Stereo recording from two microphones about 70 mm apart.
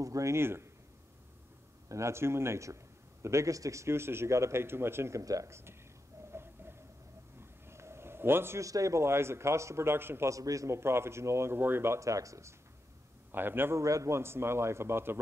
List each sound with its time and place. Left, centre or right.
0.0 s speech: right
1.9 s a man's voice: right
5.2 s speech: right
6.3 s a sound: right
8.5 s a man's voice: right
10.3 s speech: right
10.8 s a man's voice: right
13.3 s a man's voice: right
13.7 s a man's voice: right